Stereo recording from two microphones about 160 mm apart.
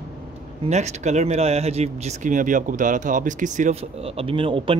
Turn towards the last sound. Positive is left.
turn(degrees=-35)  # may be behind; listen again after turning